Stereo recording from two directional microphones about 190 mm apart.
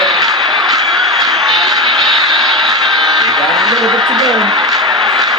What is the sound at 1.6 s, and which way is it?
Vehicle, 20° right (ahead or behind).